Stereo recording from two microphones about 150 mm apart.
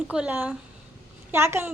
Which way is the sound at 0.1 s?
10° right (ahead or behind).